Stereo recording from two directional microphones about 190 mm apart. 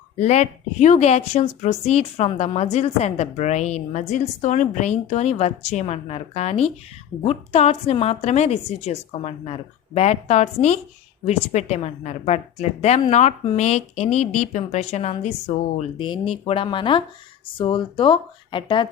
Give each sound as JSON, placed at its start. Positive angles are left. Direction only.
{"t": 0.2, "sound": "speech", "side_deg": 35}